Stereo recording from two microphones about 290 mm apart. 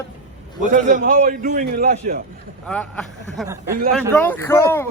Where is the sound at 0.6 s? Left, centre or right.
Right.